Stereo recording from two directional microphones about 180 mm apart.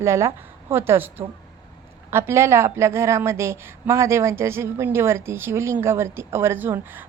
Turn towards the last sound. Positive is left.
turn(degrees=-10)  # may be behind; listen again after turning